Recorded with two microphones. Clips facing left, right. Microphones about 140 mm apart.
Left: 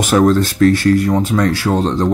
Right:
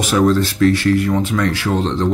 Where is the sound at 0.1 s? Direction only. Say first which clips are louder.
Left 3 dB; 50° left (ahead or behind).